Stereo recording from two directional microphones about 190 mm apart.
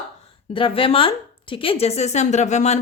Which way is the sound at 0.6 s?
30° left (ahead or behind).